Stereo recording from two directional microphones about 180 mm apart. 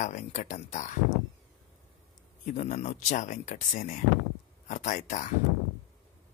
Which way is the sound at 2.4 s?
45° left (ahead or behind).